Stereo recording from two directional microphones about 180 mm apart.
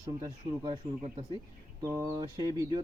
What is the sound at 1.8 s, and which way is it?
Speech, 15° right (ahead or behind).